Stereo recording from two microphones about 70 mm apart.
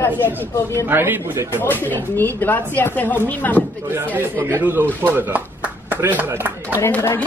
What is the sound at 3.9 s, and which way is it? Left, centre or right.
Speech, right.